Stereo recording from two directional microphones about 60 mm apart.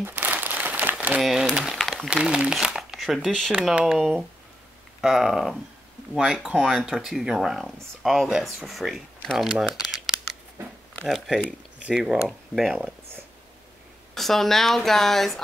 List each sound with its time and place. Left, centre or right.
0.0 s crumpling: right
1.2 s speech: centre
3.3 s speech: centre
3.8 s speech: centre
6.9 s speech: centre
14.1 s speech: centre